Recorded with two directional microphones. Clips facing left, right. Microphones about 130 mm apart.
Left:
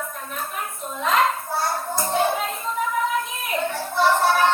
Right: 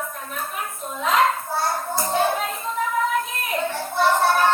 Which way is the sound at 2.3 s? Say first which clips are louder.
Even; 5° right (ahead or behind).